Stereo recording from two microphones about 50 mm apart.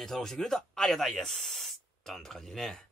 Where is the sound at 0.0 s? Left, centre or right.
Centre.